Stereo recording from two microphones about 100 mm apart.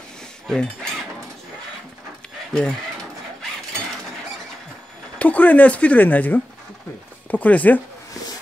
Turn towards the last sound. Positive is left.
turn(degrees=15)  # may be behind; listen again after turning